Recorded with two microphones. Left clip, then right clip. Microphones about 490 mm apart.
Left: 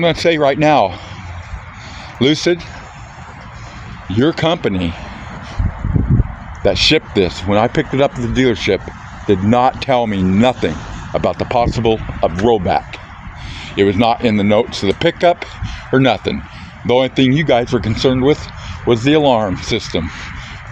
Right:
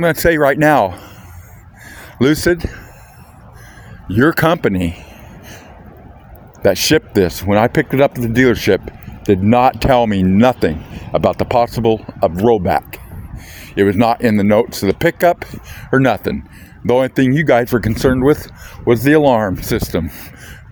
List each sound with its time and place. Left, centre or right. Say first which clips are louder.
0.0 s speech: even; right
2.2 s speech: even; right
4.1 s speech: right 2 dB; right
6.6 s speech: even; right
9.2 s speech: right 1 dB; right
13.6 s speech: even; right
17.4 s speech: right 1 dB; right
18.9 s speech: right 1 dB; right